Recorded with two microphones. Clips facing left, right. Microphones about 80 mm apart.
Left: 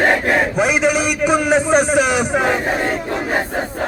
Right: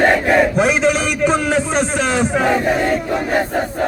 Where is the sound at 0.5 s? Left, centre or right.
Centre.